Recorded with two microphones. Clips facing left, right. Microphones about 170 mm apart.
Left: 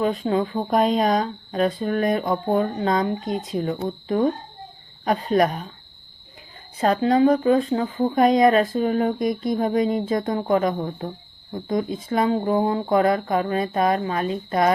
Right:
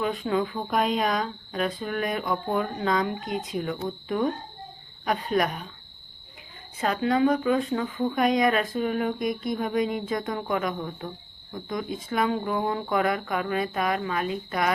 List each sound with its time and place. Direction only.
0.0 s speech: 30° left (ahead or behind)
6.7 s speech: 30° left (ahead or behind)